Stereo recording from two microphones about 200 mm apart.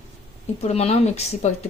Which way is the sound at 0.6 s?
30° left (ahead or behind).